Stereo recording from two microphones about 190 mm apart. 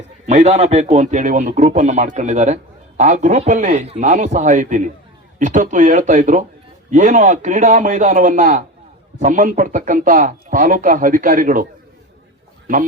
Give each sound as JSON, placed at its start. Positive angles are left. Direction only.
{"t": 0.3, "sound": "a man's voice", "side_deg": -35}